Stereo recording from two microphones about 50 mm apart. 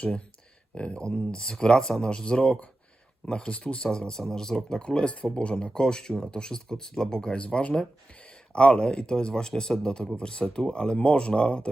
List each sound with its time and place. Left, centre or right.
0.8 s speech: centre